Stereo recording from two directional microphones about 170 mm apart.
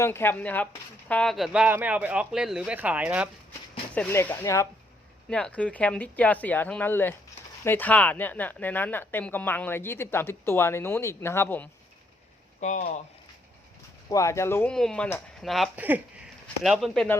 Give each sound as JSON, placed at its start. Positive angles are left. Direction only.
{"t": 0.0, "sound": "speech", "side_deg": 15}
{"t": 3.9, "sound": "speech", "side_deg": 10}
{"t": 12.5, "sound": "speech", "side_deg": 45}
{"t": 14.1, "sound": "speech", "side_deg": 20}
{"t": 14.7, "sound": "speech", "side_deg": 5}
{"t": 15.7, "sound": "speech", "side_deg": -10}